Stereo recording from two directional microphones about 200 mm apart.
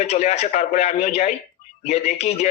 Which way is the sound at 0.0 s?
35° left (ahead or behind).